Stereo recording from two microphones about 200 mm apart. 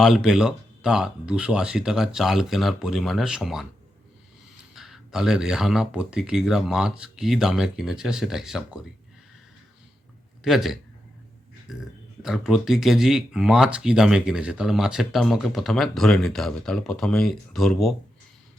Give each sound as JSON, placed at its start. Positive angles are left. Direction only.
{"t": 0.0, "sound": "speech", "side_deg": 0}
{"t": 4.7, "sound": "speech", "side_deg": 0}
{"t": 10.4, "sound": "speech", "side_deg": 0}
{"t": 12.2, "sound": "speech", "side_deg": 0}